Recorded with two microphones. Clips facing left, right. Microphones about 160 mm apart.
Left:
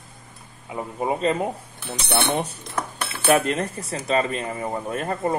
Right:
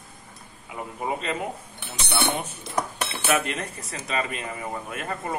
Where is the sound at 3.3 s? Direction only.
35° left (ahead or behind).